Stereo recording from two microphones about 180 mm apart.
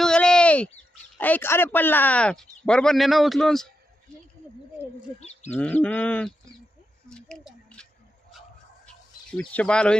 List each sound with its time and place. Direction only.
0.0 s a sound: 5° left (ahead or behind)
1.2 s speech: 10° left (ahead or behind)
5.2 s bird: 35° left (ahead or behind)
5.5 s speech: 10° left (ahead or behind)
7.1 s a sound: 5° left (ahead or behind)
9.4 s speech: 5° left (ahead or behind)